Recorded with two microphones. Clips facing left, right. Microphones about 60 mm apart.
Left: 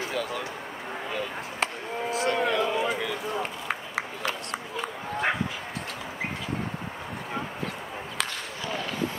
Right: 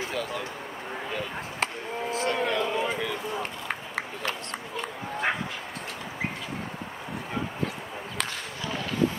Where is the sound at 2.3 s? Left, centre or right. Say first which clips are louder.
Left 2 dB; centre.